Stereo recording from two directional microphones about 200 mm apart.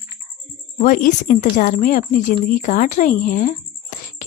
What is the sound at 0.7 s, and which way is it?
A woman's voice, 40° left (ahead or behind).